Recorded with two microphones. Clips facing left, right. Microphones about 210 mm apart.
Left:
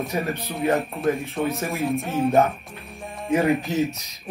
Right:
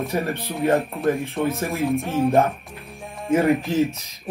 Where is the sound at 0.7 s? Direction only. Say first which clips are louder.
Right 2 dB; 30° right (ahead or behind).